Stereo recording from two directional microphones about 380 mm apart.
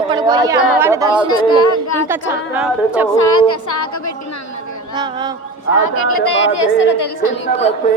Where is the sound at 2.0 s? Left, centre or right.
Centre.